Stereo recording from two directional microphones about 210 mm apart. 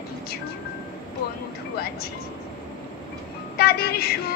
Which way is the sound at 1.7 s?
45° left (ahead or behind).